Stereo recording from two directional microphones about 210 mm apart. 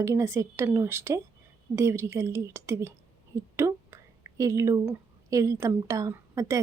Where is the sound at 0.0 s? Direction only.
15° right (ahead or behind).